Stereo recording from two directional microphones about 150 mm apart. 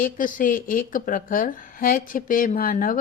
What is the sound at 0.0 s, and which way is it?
A woman's voice, 65° left (ahead or behind).